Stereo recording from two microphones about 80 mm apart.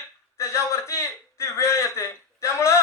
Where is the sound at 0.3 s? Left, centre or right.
Left.